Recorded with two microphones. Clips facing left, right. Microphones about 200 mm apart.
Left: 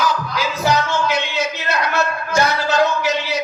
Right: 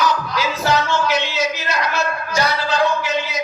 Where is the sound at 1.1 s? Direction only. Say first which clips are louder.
Right 1 dB; 60° left (ahead or behind).